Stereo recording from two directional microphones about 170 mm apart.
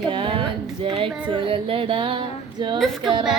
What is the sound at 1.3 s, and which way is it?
Female singing, 30° right (ahead or behind).